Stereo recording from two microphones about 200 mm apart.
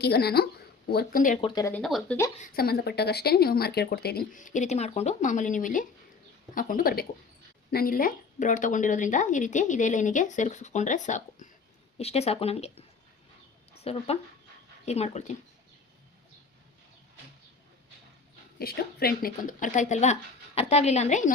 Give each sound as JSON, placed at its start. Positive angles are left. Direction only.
{"t": 0.0, "sound": "speech", "side_deg": 55}
{"t": 1.4, "sound": "speech", "side_deg": 20}
{"t": 1.7, "sound": "speech", "side_deg": 0}
{"t": 2.4, "sound": "speech", "side_deg": 50}
{"t": 13.8, "sound": "speech", "side_deg": 30}
{"t": 18.6, "sound": "speech", "side_deg": 50}